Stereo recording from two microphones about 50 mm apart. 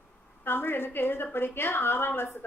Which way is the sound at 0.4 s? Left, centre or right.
Left.